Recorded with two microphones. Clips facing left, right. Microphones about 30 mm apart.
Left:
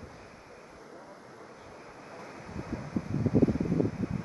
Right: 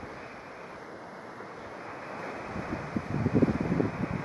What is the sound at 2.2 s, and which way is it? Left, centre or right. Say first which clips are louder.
Waves: right 4 dB; right.